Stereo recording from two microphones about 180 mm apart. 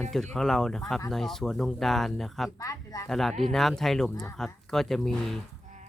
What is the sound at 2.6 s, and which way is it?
Speech, 20° left (ahead or behind).